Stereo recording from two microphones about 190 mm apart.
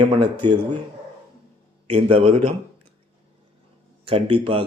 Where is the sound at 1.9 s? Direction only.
30° right (ahead or behind).